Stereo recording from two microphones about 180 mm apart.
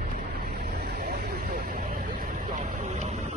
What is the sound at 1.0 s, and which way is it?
Vehicle, 55° right (ahead or behind).